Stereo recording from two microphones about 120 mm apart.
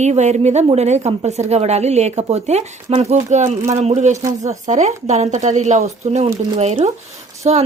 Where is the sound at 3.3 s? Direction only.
75° right (ahead or behind).